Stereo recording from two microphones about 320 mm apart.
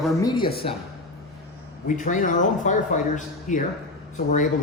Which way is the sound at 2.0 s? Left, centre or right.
Left.